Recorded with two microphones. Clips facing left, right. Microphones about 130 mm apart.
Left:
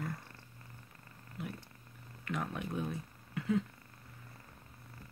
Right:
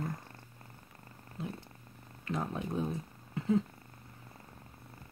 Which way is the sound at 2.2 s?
30° right (ahead or behind).